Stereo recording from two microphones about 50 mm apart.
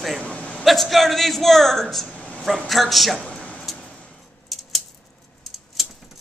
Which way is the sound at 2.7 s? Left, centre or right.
Centre.